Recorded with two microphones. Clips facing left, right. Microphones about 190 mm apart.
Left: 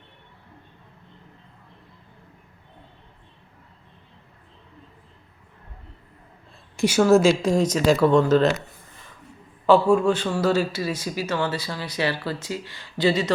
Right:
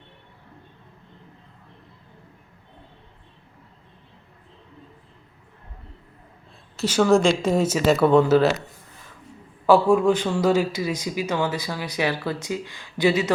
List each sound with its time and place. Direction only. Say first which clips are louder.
6.7 s a woman's voice: left 1 dB; 10° left (ahead or behind); by 8.5 s 5° right (ahead or behind)
9.6 s speech: right 1 dB; 15° right (ahead or behind)